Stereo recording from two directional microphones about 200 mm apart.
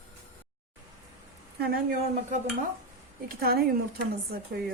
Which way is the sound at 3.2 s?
50° right (ahead or behind).